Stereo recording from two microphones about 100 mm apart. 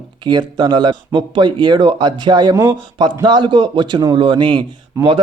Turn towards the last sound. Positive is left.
turn(degrees=-30)  # may be behind; listen again after turning